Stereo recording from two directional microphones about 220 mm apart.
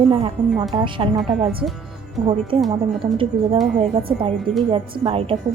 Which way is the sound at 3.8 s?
20° right (ahead or behind).